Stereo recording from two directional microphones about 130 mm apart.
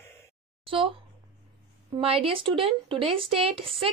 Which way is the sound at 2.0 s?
45° right (ahead or behind).